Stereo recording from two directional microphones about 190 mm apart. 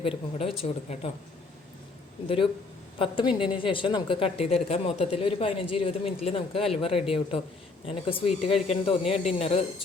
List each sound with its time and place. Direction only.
0.0 s a woman's voice: 30° left (ahead or behind)
2.2 s a woman's voice: 30° left (ahead or behind)